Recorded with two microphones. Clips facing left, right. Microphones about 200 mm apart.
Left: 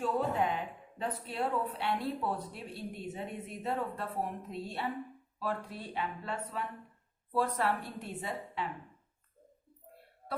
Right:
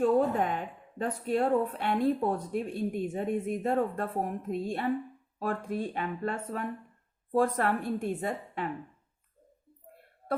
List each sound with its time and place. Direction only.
0.0 s a woman's voice: 45° right (ahead or behind)